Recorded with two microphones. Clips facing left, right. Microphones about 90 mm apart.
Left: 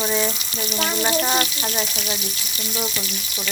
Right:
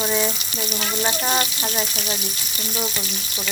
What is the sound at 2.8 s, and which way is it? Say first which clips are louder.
Frying: even; 30° right (ahead or behind).